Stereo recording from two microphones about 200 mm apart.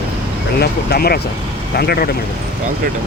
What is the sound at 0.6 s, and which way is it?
Speech, 50° left (ahead or behind).